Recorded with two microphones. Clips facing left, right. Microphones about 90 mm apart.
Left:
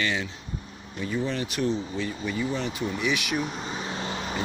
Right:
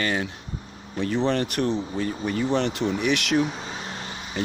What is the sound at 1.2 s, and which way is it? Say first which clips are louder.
Speech: right 3 dB; 60° right (ahead or behind).